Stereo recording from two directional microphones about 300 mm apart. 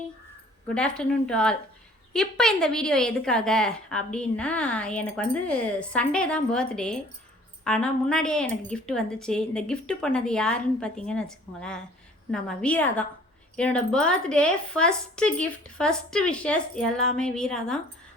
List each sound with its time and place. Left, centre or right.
0.7 s a woman's voice: centre